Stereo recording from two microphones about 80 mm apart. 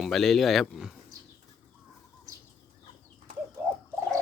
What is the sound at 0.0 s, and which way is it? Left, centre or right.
Speech, centre.